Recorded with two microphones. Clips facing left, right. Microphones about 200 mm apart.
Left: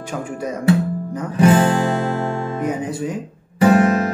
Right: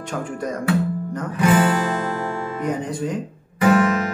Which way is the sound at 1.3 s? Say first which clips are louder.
Left 4 dB; 30° left (ahead or behind).